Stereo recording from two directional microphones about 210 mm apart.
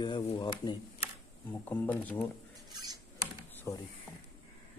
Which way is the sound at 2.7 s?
20° right (ahead or behind).